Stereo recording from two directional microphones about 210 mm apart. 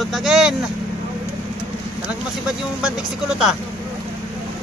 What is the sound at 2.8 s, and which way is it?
Speech, 5° right (ahead or behind).